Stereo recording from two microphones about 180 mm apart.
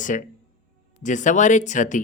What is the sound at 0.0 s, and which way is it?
Speech, 45° left (ahead or behind).